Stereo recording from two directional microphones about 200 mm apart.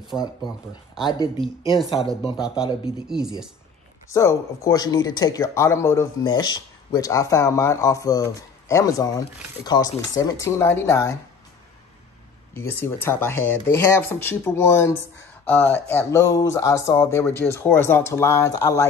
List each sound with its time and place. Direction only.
0.1 s speech: centre (ahead or behind)
1.0 s speech: 25° left (ahead or behind)
3.1 s speech: 5° right (ahead or behind)
4.1 s speech: 15° left (ahead or behind)
12.5 s speech: 10° left (ahead or behind)